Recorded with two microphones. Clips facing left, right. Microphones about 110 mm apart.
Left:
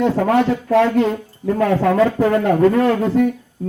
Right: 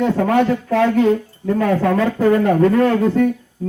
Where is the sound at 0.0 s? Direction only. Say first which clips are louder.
Even; centre (ahead or behind).